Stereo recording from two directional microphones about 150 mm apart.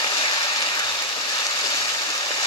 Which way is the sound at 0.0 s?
30° left (ahead or behind).